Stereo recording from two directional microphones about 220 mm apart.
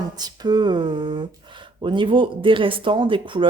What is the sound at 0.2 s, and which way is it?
Speech, 20° right (ahead or behind).